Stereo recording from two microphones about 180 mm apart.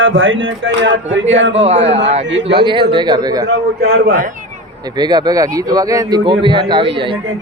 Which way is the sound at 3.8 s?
55° right (ahead or behind).